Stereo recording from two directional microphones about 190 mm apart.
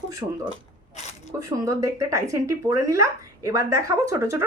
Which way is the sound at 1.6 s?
15° right (ahead or behind).